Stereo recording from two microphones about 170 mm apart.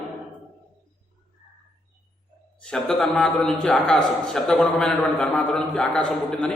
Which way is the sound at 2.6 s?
5° left (ahead or behind).